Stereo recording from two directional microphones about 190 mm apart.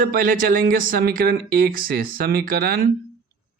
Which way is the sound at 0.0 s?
50° right (ahead or behind).